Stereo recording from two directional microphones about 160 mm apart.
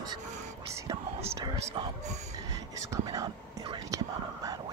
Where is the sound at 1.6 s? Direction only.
30° right (ahead or behind).